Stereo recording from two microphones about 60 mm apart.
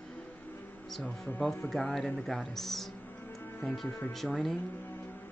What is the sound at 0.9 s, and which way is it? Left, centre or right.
Speech, centre.